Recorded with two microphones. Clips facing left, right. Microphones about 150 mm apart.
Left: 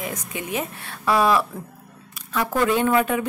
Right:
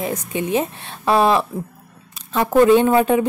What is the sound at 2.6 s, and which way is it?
Speech, 25° right (ahead or behind).